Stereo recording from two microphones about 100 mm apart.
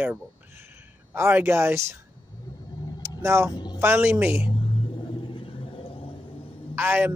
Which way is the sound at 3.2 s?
30° right (ahead or behind).